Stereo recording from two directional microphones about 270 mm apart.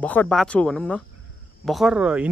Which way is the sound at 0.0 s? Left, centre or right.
Centre.